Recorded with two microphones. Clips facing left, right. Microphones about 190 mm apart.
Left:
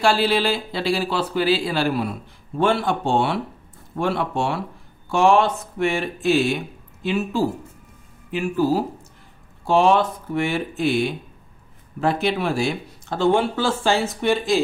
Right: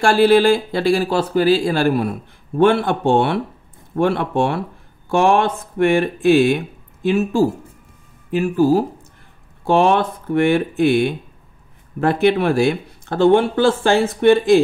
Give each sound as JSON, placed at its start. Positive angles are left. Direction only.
{"t": 0.0, "sound": "speech", "side_deg": -50}
{"t": 9.7, "sound": "speech", "side_deg": -60}